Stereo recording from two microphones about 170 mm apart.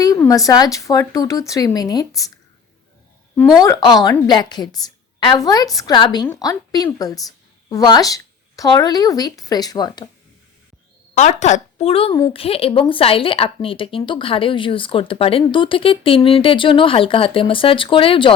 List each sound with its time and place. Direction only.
0.0 s speech: 20° left (ahead or behind)
3.3 s a woman's voice: 5° left (ahead or behind)
3.6 s a woman's voice: 20° left (ahead or behind)
11.1 s a woman's voice: 45° left (ahead or behind)